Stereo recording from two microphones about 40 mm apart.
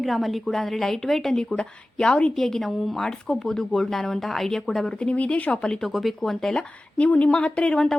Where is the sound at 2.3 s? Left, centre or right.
Centre.